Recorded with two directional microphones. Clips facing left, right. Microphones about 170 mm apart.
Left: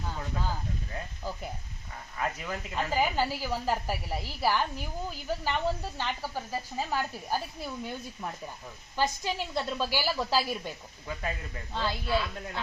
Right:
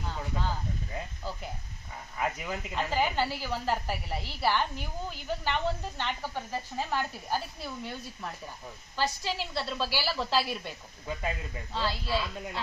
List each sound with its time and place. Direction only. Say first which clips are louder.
2.1 s speech: right 1 dB; 10° right (ahead or behind)
2.7 s speech: left 1 dB; 10° left (ahead or behind)
11.0 s speech: right 1 dB; 10° right (ahead or behind)
11.7 s speech: even; 15° left (ahead or behind)
12.0 s speech: left 2 dB; 10° right (ahead or behind)